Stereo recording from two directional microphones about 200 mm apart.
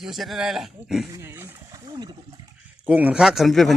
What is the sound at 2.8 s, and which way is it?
Speech, 10° right (ahead or behind).